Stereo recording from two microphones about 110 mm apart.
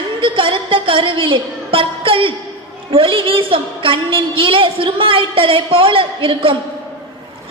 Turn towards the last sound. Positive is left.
turn(degrees=-50)  # may be behind; listen again after turning